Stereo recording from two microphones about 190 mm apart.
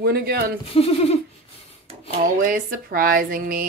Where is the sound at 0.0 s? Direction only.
55° right (ahead or behind).